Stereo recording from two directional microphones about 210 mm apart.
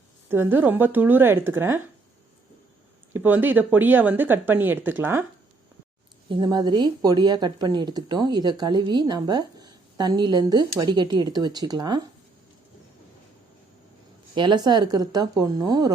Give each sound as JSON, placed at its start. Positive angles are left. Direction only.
{"t": 0.3, "sound": "speech", "side_deg": -10}
{"t": 3.1, "sound": "speech", "side_deg": -10}
{"t": 6.2, "sound": "speech", "side_deg": -20}
{"t": 14.3, "sound": "speech", "side_deg": -20}